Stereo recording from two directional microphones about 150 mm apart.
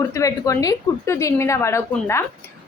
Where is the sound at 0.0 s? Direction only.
20° left (ahead or behind).